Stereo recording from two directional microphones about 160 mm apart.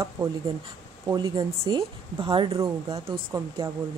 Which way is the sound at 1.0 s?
25° right (ahead or behind).